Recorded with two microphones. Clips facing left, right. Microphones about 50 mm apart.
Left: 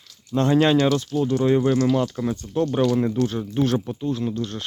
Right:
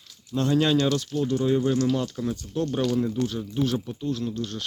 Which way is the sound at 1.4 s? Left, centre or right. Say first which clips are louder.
Left 4 dB; left.